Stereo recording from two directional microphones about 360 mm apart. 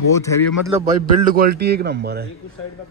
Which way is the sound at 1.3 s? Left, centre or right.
Right.